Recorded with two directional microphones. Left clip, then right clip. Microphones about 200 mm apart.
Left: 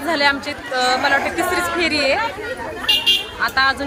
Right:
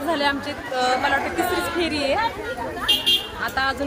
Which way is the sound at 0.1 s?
15° left (ahead or behind).